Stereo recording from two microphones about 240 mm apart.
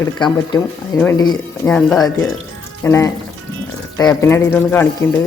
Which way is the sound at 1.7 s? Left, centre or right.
Centre.